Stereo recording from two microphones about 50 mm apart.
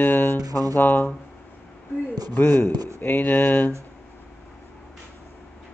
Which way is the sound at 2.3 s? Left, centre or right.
Left.